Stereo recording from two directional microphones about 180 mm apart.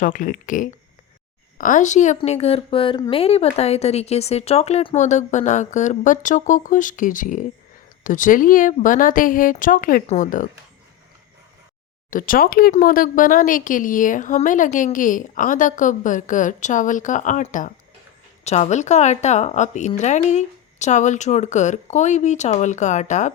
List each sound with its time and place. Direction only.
0.0 s speech: 50° left (ahead or behind)
12.1 s speech: 50° left (ahead or behind)